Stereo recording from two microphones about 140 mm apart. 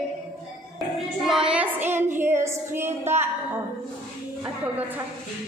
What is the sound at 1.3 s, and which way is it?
Child singing, 5° right (ahead or behind).